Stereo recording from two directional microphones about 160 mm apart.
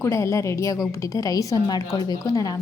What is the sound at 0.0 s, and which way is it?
A woman's voice, 20° left (ahead or behind).